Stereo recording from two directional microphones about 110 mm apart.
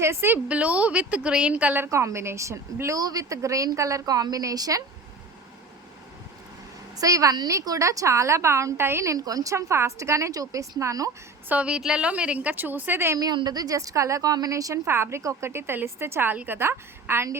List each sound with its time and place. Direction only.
0.0 s a woman's voice: 25° right (ahead or behind)
6.9 s a woman's voice: 30° right (ahead or behind)
11.4 s a woman's voice: 10° right (ahead or behind)
13.1 s a woman's voice: 40° right (ahead or behind); by 17.3 s 20° right (ahead or behind)